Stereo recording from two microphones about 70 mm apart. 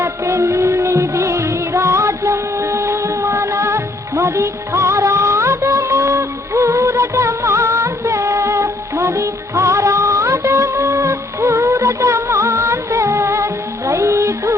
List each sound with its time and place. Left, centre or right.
0.0 s music: right
5.8 s music of bollywood: right